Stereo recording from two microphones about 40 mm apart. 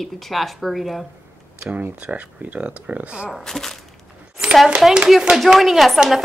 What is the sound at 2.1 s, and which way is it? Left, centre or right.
Speech, right.